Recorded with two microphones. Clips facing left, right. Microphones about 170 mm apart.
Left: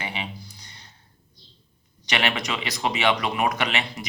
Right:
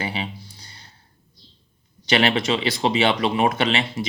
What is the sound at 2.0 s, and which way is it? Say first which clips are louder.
Speech: right 7 dB; 30° right (ahead or behind).